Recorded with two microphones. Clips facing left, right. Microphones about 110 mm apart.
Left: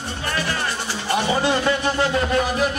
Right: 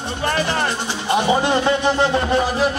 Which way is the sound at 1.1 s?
20° right (ahead or behind).